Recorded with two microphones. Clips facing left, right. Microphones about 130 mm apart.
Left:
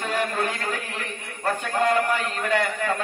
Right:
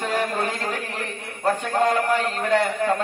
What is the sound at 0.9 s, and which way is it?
A man's voice, 30° right (ahead or behind).